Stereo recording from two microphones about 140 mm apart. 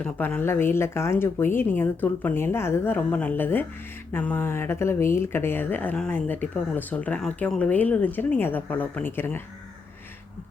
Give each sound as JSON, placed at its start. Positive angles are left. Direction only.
{"t": 0.0, "sound": "speech", "side_deg": 10}